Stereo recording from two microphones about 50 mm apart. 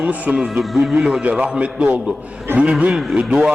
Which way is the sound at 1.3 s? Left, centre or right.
Right.